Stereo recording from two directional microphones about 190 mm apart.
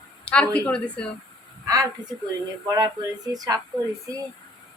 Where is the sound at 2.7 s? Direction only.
20° right (ahead or behind).